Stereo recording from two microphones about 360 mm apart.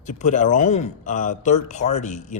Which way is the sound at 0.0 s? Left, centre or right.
Centre.